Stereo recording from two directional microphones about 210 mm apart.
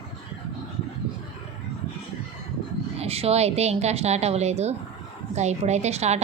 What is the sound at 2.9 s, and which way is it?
A woman's voice, 30° right (ahead or behind).